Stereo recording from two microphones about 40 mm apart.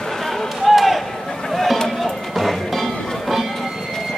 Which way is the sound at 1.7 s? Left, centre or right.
Centre.